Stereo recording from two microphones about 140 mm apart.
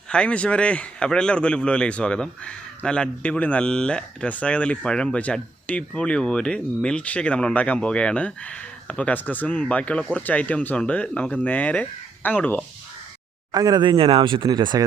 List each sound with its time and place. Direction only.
0.1 s speech: 10° left (ahead or behind)
13.5 s speech: 30° right (ahead or behind)